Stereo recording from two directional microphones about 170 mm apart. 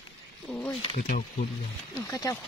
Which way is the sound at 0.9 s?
55° left (ahead or behind).